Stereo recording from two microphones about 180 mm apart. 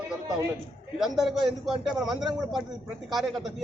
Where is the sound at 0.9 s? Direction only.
Centre (ahead or behind).